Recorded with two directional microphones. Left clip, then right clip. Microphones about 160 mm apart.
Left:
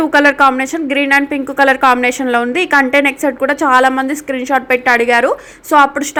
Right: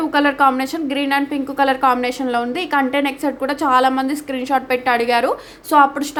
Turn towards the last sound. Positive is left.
turn(degrees=20)  # may be behind; listen again after turning